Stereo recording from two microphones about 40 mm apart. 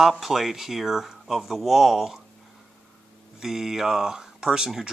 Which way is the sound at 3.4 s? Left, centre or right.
Centre.